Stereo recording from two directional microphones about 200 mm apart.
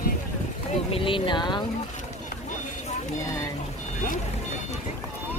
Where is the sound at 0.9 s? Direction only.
25° left (ahead or behind).